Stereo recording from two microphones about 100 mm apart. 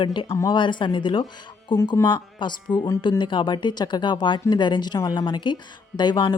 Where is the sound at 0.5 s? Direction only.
50° left (ahead or behind).